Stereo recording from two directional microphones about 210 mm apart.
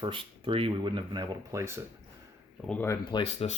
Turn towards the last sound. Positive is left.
turn(degrees=30)  # may be behind; listen again after turning